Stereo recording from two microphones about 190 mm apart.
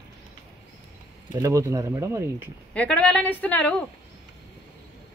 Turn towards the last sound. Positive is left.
turn(degrees=10)  # may be behind; listen again after turning